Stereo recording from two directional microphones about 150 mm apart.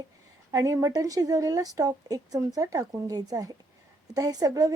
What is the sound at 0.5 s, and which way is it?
A woman's voice, 20° right (ahead or behind).